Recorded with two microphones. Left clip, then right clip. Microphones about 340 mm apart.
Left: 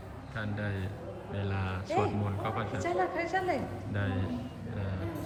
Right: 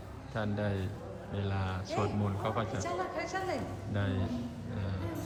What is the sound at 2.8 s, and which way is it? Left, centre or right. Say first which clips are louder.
Speech: left 4 dB; left.